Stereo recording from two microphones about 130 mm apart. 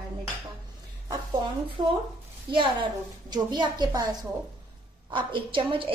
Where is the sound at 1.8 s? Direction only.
35° right (ahead or behind).